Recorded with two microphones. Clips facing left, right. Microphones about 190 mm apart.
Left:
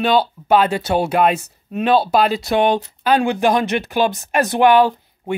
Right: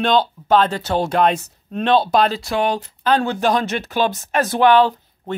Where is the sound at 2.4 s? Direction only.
20° left (ahead or behind).